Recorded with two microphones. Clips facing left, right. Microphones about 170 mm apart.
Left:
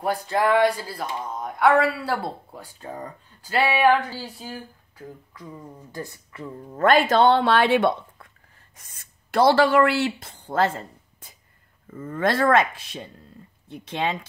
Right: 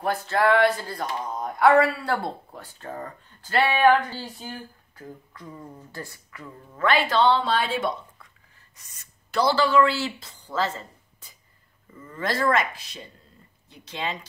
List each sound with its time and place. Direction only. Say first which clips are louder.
0.0 s speech: even; 15° left (ahead or behind)
2.1 s speech: even; 10° left (ahead or behind)
6.7 s speech: left 5 dB; 45° left (ahead or behind)